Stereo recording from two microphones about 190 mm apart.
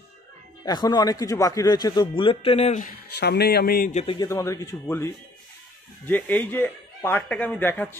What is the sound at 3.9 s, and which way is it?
Speech, 35° left (ahead or behind).